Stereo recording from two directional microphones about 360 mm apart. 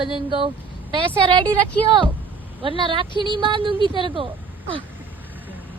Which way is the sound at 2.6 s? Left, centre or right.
Centre.